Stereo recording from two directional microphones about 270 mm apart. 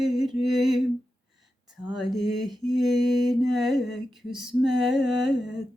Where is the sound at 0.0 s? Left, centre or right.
Centre.